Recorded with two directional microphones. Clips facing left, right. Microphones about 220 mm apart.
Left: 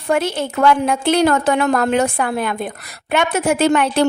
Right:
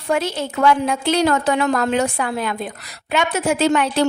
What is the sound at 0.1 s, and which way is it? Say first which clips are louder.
A woman's voice: left 2 dB; 55° left (ahead or behind).